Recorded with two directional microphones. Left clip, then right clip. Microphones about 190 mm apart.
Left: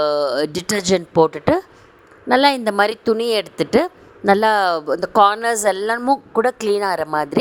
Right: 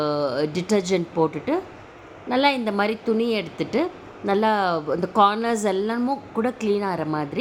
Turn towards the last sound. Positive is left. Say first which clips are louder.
# left 7 dB
turn(degrees=50)  # may be behind; listen again after turning